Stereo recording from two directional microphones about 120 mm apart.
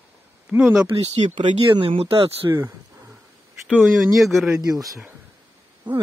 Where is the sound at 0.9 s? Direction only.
50° right (ahead or behind).